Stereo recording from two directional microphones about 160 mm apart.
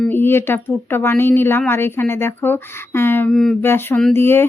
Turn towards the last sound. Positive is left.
turn(degrees=15)  # may be behind; listen again after turning